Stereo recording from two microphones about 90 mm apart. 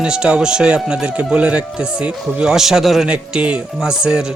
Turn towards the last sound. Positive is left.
turn(degrees=-10)  # may be behind; listen again after turning